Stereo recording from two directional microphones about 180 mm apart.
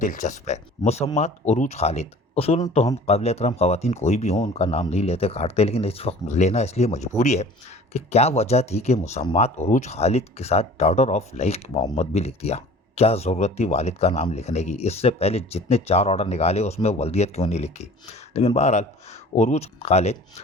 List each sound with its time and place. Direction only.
0.0 s speech: 45° left (ahead or behind)